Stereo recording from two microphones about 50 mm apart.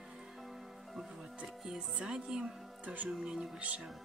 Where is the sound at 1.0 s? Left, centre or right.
Centre.